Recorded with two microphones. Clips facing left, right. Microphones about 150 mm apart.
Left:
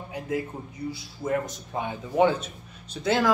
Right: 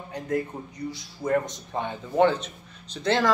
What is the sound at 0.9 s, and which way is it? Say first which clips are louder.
A man's voice: right 3 dB; 5° left (ahead or behind).